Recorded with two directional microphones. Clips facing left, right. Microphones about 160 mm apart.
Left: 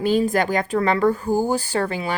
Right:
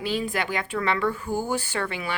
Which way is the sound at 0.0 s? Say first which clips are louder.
Left 8 dB; 45° left (ahead or behind).